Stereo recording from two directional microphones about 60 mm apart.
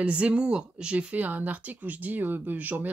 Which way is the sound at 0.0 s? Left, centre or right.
Centre.